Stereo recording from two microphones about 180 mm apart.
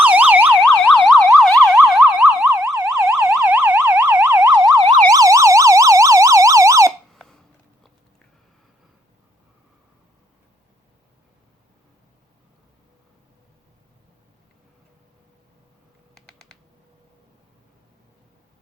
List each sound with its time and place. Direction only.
0.0 s emergency vehicle: 10° right (ahead or behind)
2.5 s emergency vehicle: 15° right (ahead or behind)
4.5 s emergency vehicle: 20° right (ahead or behind)
7.1 s squeak: centre (ahead or behind)
16.1 s typing: centre (ahead or behind)